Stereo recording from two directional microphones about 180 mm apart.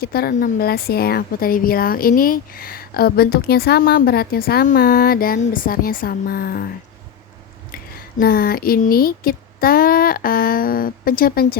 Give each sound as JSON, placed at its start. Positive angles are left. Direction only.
{"t": 0.0, "sound": "speech", "side_deg": 55}
{"t": 8.2, "sound": "speech", "side_deg": 55}